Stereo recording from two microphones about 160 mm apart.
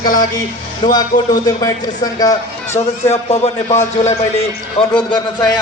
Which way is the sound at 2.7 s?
40° left (ahead or behind).